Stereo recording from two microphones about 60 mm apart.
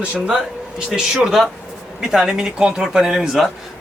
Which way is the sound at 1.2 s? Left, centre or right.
Centre.